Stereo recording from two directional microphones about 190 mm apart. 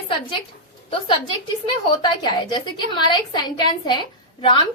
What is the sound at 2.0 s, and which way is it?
A woman's voice, 25° left (ahead or behind).